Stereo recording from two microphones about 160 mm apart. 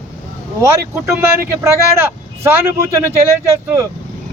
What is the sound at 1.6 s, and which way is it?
Speech, 15° right (ahead or behind).